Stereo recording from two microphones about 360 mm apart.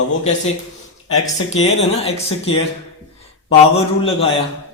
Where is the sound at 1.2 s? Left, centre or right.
Centre.